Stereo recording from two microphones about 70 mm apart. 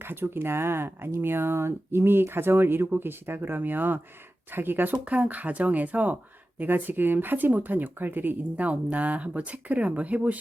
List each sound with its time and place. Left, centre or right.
0.0 s speech: right